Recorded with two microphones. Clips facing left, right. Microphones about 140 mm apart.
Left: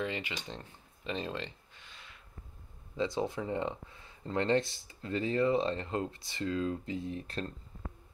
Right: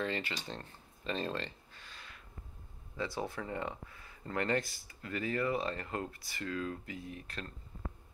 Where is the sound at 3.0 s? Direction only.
20° left (ahead or behind).